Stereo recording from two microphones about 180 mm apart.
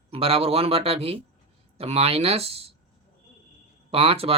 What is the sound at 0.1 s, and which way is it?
Speech, 30° right (ahead or behind).